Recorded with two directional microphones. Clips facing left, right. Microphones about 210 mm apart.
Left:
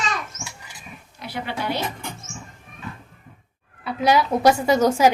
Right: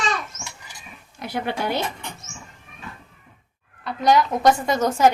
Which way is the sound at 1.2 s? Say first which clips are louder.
Right 3 dB; 50° right (ahead or behind).